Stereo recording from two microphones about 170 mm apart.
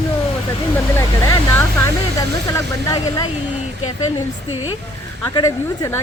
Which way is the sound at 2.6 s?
20° left (ahead or behind).